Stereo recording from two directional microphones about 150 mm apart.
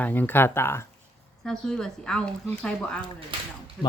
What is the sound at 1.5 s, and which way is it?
Speech, 5° left (ahead or behind).